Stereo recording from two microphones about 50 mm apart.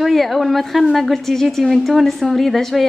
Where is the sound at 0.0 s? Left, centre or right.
Centre.